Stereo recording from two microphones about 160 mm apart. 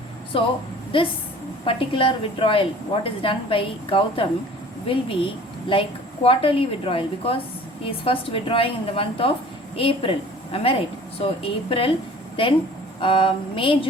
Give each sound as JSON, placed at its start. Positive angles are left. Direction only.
{"t": 0.3, "sound": "a woman's voice", "side_deg": 35}
{"t": 13.0, "sound": "a woman's voice", "side_deg": 35}